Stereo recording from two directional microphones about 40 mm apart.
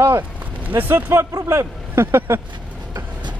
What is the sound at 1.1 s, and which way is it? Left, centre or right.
Speech, right.